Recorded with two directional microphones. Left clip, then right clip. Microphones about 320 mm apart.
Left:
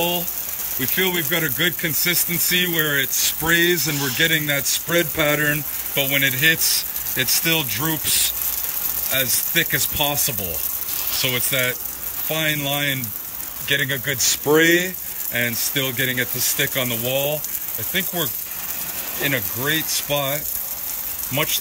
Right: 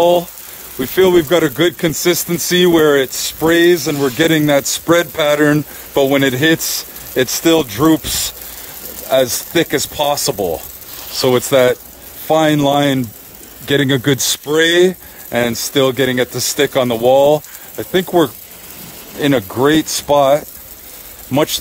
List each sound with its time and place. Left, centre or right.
0.7 s speech: centre
19.2 s speech: centre